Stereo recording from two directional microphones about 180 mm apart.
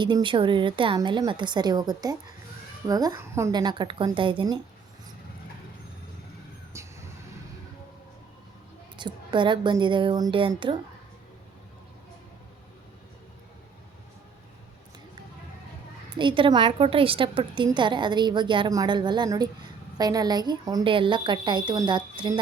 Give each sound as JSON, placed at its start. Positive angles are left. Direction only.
{"t": 0.0, "sound": "a woman's voice", "side_deg": -25}
{"t": 6.7, "sound": "vehicle", "side_deg": -15}
{"t": 9.0, "sound": "a woman's voice", "side_deg": -25}
{"t": 16.1, "sound": "a woman's voice", "side_deg": -30}